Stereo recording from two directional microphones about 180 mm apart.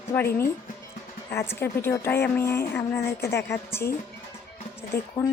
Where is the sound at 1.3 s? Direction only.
15° left (ahead or behind).